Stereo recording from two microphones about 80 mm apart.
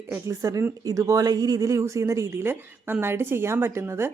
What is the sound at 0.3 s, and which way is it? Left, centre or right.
Speech, right.